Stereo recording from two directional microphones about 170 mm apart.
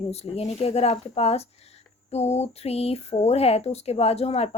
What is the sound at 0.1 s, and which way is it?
Speech, 40° left (ahead or behind).